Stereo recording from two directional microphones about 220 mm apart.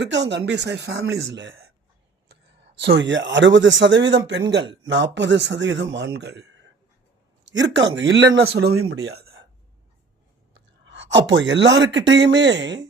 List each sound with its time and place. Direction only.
0.0 s speech: 50° right (ahead or behind)
2.9 s speech: 55° right (ahead or behind)
7.7 s speech: 55° right (ahead or behind)
8.9 s a sound: 50° right (ahead or behind)
10.8 s speech: 55° right (ahead or behind)